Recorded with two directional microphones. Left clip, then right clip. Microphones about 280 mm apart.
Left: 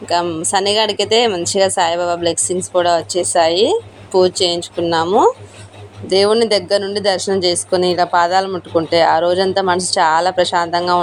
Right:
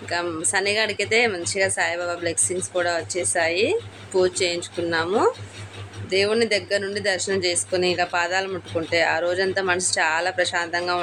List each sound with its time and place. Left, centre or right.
0.1 s a woman's voice: centre